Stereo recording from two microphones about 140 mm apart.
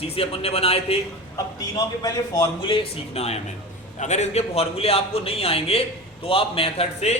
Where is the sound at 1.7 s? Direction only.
30° left (ahead or behind).